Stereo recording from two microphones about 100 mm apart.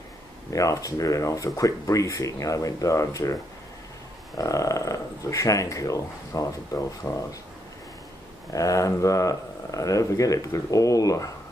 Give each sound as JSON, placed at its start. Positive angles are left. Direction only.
{"t": 0.5, "sound": "speech", "side_deg": 35}
{"t": 4.4, "sound": "speech", "side_deg": 35}
{"t": 8.5, "sound": "speech", "side_deg": 35}